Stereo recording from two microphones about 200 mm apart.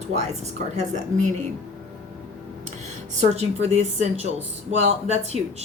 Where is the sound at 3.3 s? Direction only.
30° right (ahead or behind).